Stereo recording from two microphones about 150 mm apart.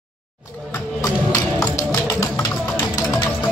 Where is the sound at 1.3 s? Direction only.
20° left (ahead or behind).